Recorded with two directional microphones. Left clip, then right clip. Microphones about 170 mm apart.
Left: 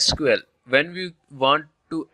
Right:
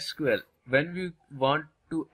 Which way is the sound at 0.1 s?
40° left (ahead or behind).